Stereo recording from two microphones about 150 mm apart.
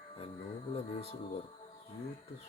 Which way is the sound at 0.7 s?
40° left (ahead or behind).